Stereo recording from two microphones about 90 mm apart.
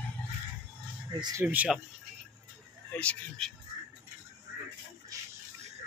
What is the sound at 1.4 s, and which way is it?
Speech, 20° right (ahead or behind).